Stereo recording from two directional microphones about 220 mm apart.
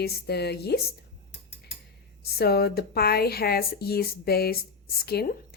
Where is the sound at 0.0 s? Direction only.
45° left (ahead or behind).